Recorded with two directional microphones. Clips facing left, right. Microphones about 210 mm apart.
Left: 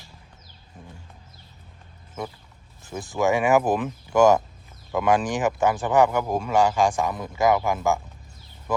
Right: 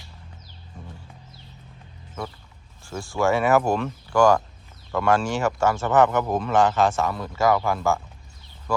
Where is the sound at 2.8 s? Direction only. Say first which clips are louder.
Even; 20° left (ahead or behind).